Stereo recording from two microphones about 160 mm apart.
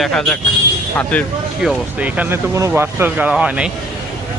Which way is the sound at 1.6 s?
5° right (ahead or behind).